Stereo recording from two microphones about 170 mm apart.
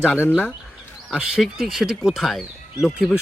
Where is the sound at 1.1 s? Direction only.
5° right (ahead or behind).